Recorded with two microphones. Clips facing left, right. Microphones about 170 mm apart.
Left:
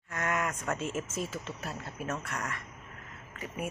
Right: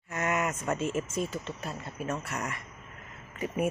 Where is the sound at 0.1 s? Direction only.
10° right (ahead or behind).